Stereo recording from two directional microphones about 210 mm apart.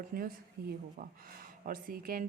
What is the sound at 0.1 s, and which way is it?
A woman's voice, 45° right (ahead or behind).